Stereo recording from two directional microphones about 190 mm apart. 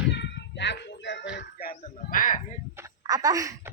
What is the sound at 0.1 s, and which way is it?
Music, 65° left (ahead or behind).